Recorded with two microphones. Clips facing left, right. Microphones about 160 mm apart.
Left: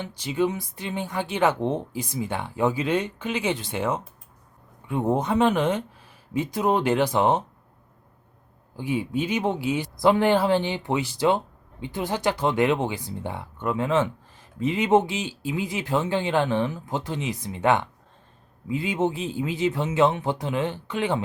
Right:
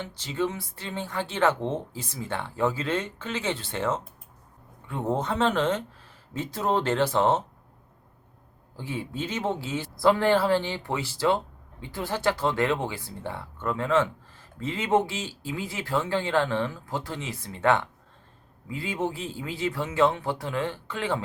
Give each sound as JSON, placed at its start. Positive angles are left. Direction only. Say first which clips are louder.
{"t": 0.0, "sound": "speech", "louder": "left 4 dB", "side_deg": 15}
{"t": 8.7, "sound": "speech", "louder": "left 7 dB", "side_deg": 15}